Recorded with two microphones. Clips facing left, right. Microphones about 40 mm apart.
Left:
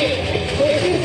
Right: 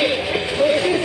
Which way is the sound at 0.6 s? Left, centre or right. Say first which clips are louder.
Even; centre.